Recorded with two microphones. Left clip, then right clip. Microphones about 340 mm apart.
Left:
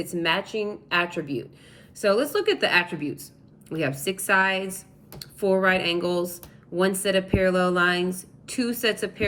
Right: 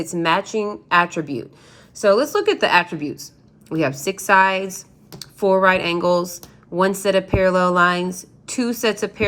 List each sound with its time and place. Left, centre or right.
0.0 s speech: centre